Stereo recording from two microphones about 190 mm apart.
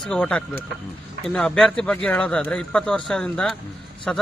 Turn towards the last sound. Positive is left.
turn(degrees=5)  # may be behind; listen again after turning